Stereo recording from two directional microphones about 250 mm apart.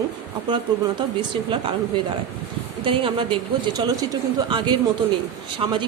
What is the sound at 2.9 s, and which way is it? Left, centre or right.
Speech, centre.